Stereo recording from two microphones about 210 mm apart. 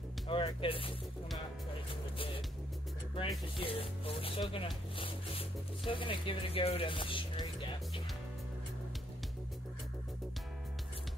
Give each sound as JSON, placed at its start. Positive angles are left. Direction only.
{"t": 0.3, "sound": "speech", "side_deg": 25}
{"t": 3.2, "sound": "speech", "side_deg": 25}